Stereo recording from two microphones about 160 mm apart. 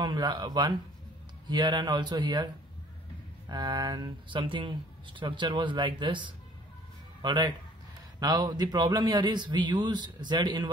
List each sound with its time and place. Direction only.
0.0 s a man's voice: 25° right (ahead or behind)